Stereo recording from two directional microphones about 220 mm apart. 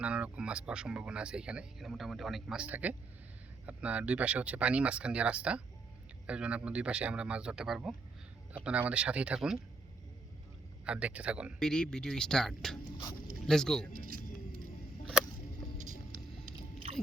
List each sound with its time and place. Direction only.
0.0 s speech: 5° right (ahead or behind)
10.8 s speech: 5° right (ahead or behind)
13.9 s music: 40° right (ahead or behind)